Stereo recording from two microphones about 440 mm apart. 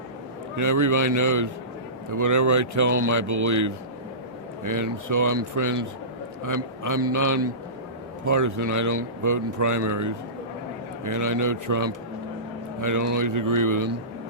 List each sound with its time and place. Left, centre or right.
0.5 s a man's voice: right